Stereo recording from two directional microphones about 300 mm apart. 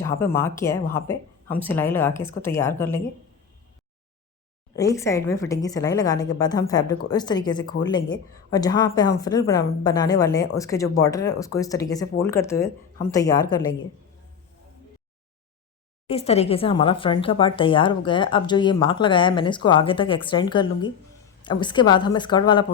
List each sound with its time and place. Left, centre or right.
0.0 s speech: centre
4.7 s speech: centre
16.0 s speech: centre